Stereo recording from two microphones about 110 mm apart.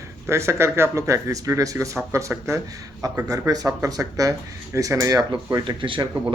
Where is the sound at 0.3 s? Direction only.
25° right (ahead or behind).